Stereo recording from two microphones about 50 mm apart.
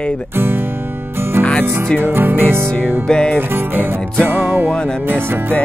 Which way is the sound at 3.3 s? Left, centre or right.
Right.